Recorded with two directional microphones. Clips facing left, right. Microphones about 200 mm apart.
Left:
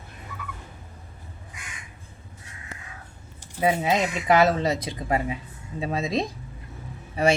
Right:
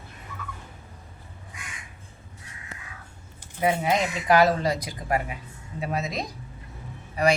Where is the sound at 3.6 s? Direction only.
20° left (ahead or behind).